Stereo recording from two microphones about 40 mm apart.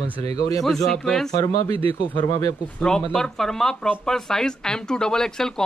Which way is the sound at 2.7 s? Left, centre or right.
Centre.